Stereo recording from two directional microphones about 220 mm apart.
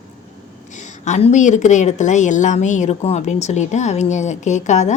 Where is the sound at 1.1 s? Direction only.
30° left (ahead or behind).